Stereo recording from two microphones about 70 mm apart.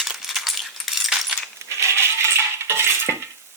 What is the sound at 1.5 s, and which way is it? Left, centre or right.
Coin, right.